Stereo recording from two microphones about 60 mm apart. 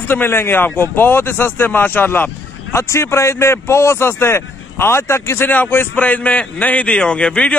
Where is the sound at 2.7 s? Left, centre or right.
Left.